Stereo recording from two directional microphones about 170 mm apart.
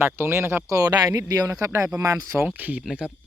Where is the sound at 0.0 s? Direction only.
15° right (ahead or behind).